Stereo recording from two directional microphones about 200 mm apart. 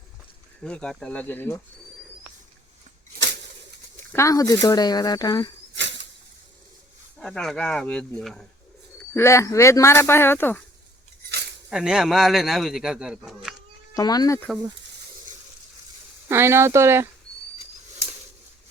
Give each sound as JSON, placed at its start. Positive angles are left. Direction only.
{"t": 0.6, "sound": "speech", "side_deg": 5}
{"t": 4.1, "sound": "speech", "side_deg": 15}
{"t": 5.7, "sound": "a sound", "side_deg": -60}
{"t": 7.2, "sound": "a man's voice", "side_deg": 5}
{"t": 9.0, "sound": "speech", "side_deg": 15}
{"t": 11.7, "sound": "a man's voice", "side_deg": -5}
{"t": 13.9, "sound": "speech", "side_deg": 20}
{"t": 16.3, "sound": "speech", "side_deg": -10}